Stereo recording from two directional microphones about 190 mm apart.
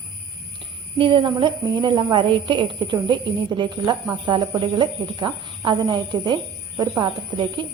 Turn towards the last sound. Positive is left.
turn(degrees=-25)  # may be behind; listen again after turning